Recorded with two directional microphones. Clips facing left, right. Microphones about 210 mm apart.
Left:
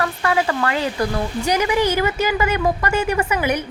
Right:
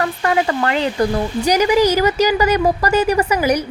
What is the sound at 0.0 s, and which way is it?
A woman's voice, 30° right (ahead or behind).